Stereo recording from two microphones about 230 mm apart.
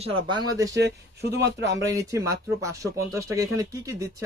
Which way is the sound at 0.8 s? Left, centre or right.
Right.